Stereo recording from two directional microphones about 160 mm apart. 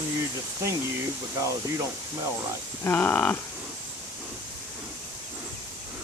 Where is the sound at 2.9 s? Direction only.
10° left (ahead or behind).